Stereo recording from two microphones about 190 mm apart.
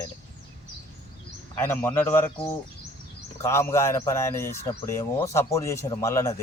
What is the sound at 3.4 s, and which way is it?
Speech, 15° left (ahead or behind).